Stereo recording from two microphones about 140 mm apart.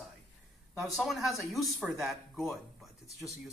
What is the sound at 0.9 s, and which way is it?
Speech, centre (ahead or behind).